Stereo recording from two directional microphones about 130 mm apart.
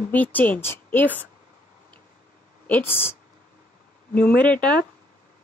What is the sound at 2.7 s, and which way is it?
A woman's voice, 15° left (ahead or behind).